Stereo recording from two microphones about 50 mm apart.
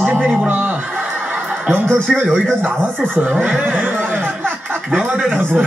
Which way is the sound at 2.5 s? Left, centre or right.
Right.